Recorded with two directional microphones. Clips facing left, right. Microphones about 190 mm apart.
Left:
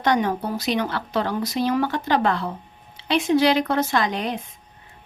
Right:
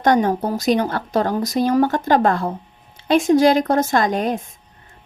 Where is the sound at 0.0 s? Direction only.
45° right (ahead or behind).